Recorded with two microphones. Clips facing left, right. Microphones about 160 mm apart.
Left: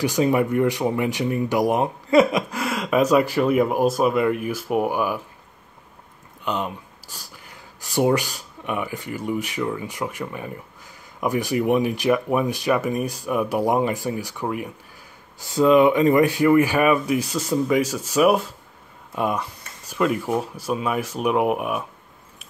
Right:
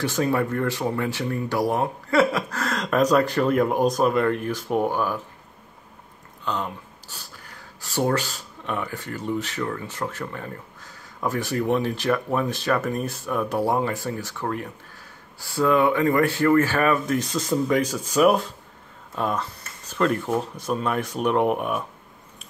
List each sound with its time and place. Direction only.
0.0 s speech: 15° left (ahead or behind)
6.4 s speech: 15° left (ahead or behind)